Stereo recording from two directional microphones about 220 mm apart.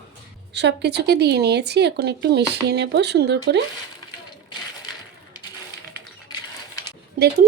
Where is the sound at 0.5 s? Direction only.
50° right (ahead or behind).